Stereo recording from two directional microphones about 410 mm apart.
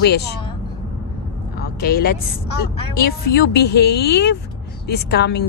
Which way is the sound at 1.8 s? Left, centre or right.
Left.